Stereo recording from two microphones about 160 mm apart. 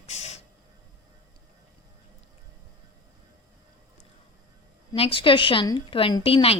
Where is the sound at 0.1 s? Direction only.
45° left (ahead or behind).